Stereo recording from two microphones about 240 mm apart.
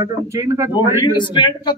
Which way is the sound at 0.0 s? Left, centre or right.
Centre.